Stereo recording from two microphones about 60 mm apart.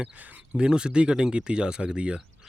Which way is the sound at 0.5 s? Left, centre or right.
Centre.